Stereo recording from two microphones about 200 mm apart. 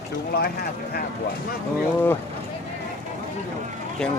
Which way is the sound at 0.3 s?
50° left (ahead or behind).